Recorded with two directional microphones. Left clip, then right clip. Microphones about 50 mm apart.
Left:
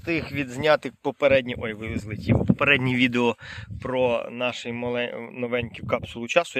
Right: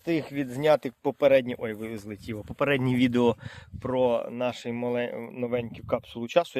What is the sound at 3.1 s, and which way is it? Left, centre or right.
Speech, right.